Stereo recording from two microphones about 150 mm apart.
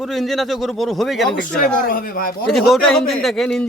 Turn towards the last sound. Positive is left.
turn(degrees=5)  # may be behind; listen again after turning